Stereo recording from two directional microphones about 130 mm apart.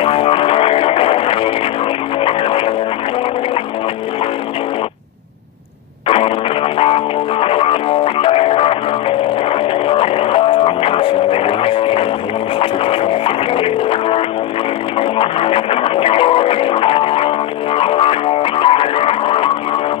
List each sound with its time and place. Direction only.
0.0 s music: 45° left (ahead or behind)
6.0 s a sound: 45° left (ahead or behind)
6.8 s music: 45° left (ahead or behind)